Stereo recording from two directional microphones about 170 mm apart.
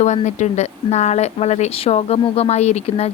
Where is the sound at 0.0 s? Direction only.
45° left (ahead or behind).